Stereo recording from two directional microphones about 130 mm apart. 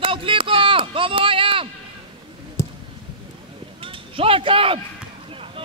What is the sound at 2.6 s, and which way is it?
Clicking, 20° left (ahead or behind).